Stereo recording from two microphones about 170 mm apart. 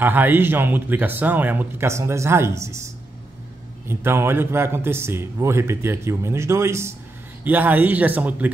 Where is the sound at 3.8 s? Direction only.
15° right (ahead or behind).